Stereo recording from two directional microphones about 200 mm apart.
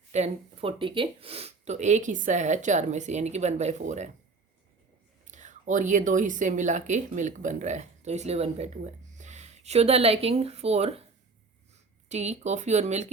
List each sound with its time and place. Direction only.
0.1 s speech: 30° right (ahead or behind)
5.2 s a woman's voice: 40° right (ahead or behind)
12.0 s speech: 35° right (ahead or behind)